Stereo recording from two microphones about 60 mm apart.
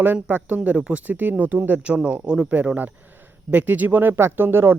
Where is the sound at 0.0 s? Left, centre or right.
Right.